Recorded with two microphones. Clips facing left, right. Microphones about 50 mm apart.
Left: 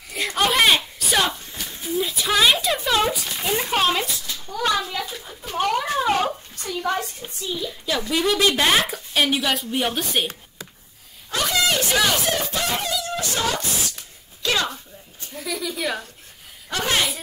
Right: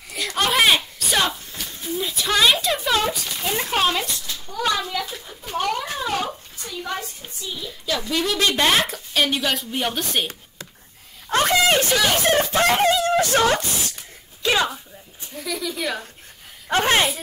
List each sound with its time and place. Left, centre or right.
0.4 s a sound: centre
4.9 s a woman's voice: centre
5.9 s bathtub: left
6.6 s a child's voice: left
7.2 s a woman's voice: centre
8.1 s a woman's voice: centre
11.2 s a sound: right
14.4 s a sound: centre
15.3 s a woman's voice: centre
16.6 s speech: right